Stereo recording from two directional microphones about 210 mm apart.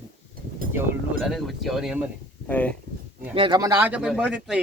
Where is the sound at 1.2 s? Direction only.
Centre (ahead or behind).